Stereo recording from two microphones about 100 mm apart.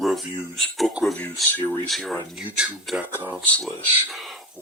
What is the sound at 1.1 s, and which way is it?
Speech, 15° left (ahead or behind).